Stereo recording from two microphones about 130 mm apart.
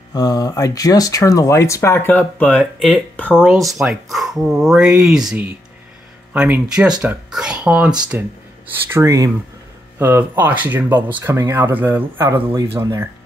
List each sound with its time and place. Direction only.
0.1 s speech: 30° left (ahead or behind); by 3.4 s 10° left (ahead or behind)
3.4 s speech: centre (ahead or behind)
8.9 s speech: 25° right (ahead or behind)